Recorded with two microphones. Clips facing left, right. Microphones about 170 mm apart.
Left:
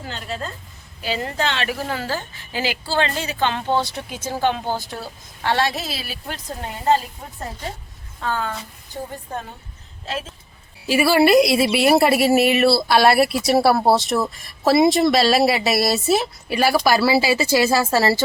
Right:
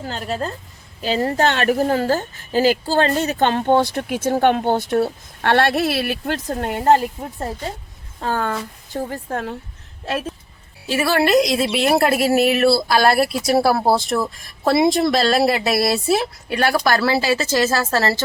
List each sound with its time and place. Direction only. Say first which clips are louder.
0.0 s a woman's voice: right 5 dB; 40° right (ahead or behind); by 7.0 s 65° right (ahead or behind)
8.2 s a woman's voice: right 3 dB; 45° right (ahead or behind)
8.9 s a woman's voice: right 5 dB; 90° right
10.8 s a woman's voice: left 3 dB; 10° left (ahead or behind)